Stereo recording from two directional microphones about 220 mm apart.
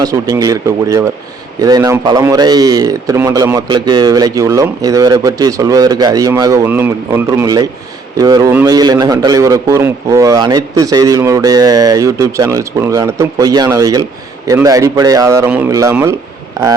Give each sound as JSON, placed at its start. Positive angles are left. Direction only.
{"t": 0.0, "sound": "a man's voice", "side_deg": -15}